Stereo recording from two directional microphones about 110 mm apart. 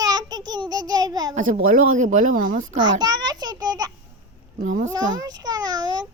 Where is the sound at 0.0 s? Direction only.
35° right (ahead or behind).